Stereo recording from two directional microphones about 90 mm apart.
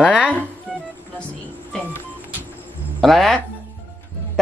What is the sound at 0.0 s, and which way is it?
Music, 15° right (ahead or behind).